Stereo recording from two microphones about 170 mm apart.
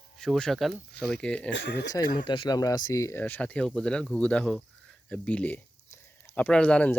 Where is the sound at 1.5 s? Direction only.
90° left.